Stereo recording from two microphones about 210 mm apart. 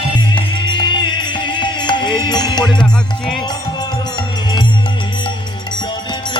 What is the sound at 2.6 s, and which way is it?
Music, 5° left (ahead or behind).